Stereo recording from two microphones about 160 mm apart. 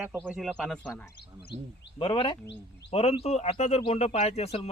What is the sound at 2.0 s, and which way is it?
Speech, 30° left (ahead or behind).